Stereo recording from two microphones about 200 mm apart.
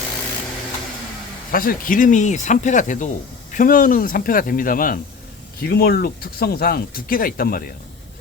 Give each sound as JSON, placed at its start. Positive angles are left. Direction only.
{"t": 1.5, "sound": "speech", "side_deg": 45}